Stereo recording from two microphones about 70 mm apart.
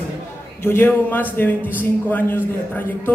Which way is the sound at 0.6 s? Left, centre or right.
Left.